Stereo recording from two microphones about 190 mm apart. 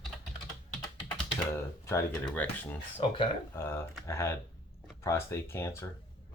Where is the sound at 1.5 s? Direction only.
15° left (ahead or behind).